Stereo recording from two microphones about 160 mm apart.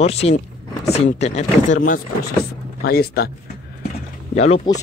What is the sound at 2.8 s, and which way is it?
Speech, 75° left (ahead or behind).